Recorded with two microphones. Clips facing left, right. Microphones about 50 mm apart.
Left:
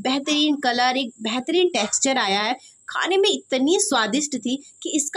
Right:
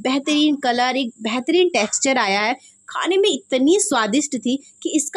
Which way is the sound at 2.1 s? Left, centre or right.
Right.